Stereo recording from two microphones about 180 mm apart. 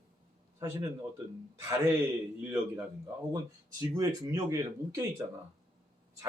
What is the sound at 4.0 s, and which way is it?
Speech, 20° right (ahead or behind).